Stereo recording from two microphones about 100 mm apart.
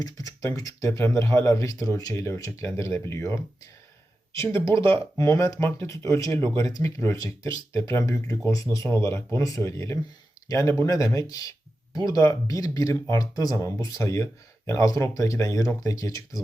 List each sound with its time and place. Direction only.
0.0 s speech: 35° left (ahead or behind)